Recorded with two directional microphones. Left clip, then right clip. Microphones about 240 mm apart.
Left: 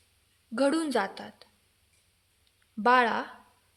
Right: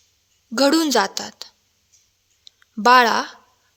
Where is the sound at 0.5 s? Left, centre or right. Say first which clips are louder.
Right 10 dB; right.